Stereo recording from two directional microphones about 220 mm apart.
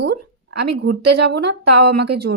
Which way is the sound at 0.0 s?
50° right (ahead or behind).